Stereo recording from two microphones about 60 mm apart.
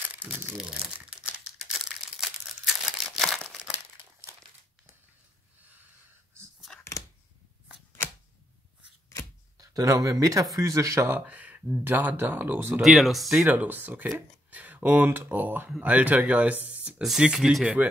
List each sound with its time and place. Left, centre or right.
0.1 s crumpling: right
0.6 s crumpling: centre
1.7 s a sound: centre
3.2 s crumpling: centre
3.4 s crumpling: centre
6.7 s a sound: centre
9.6 s speech: right
11.1 s speech: right
11.8 s speech: right
12.8 s speech: centre
13.4 s speech: right
14.1 s a sound: right
15.0 s speech: right
17.0 s speech: centre